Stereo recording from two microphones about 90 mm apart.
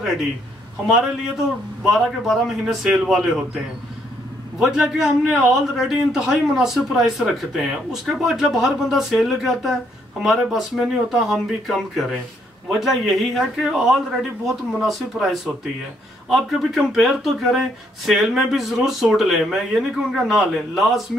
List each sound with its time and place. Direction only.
0.8 s a man's voice: 5° right (ahead or behind)
4.6 s a man's voice: 5° right (ahead or behind)